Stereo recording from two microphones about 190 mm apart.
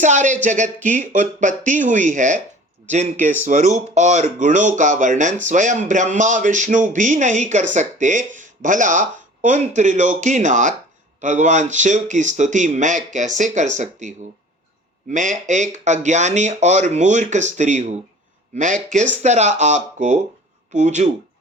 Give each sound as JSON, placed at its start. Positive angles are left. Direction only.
{"t": 0.0, "sound": "speech", "side_deg": -40}
{"t": 15.1, "sound": "speech", "side_deg": -40}